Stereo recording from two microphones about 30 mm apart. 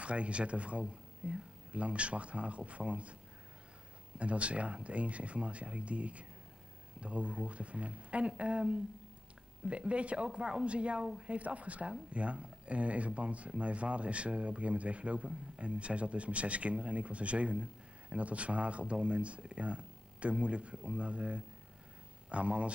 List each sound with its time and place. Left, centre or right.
0.0 s speech: right
4.2 s speech: right